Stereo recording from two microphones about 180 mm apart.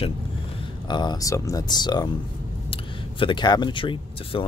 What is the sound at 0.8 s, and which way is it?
Speech, 25° left (ahead or behind).